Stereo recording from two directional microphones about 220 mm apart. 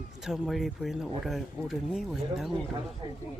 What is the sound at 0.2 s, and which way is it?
Speech, centre (ahead or behind).